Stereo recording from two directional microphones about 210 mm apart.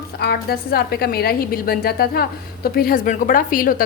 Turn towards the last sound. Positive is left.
turn(degrees=40)  # may be behind; listen again after turning